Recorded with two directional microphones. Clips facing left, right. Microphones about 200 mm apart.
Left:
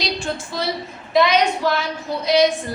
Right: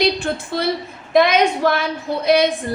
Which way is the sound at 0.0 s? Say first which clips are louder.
Right 6 dB; 60° right (ahead or behind).